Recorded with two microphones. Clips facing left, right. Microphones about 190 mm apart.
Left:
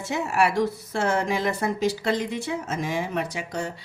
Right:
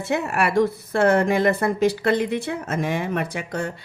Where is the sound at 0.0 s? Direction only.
60° right (ahead or behind).